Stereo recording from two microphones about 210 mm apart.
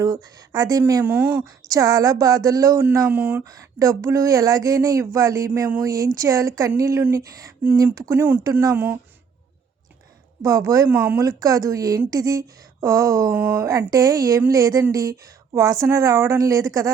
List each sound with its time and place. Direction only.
0.0 s a woman's voice: 15° right (ahead or behind)
10.4 s a woman's voice: 15° right (ahead or behind)